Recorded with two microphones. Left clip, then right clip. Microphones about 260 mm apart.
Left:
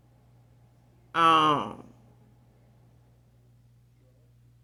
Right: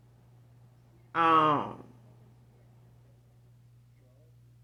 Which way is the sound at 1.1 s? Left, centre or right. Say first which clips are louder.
Left 3 dB; left.